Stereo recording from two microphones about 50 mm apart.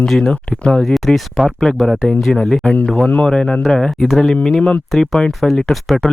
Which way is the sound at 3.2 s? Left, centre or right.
Centre.